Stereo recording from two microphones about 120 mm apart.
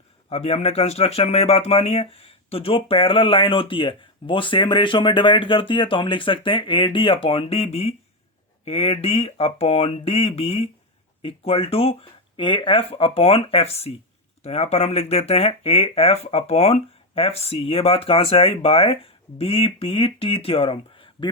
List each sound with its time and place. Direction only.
0.3 s speech: 55° left (ahead or behind)